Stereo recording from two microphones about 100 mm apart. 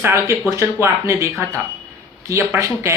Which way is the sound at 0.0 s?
25° right (ahead or behind).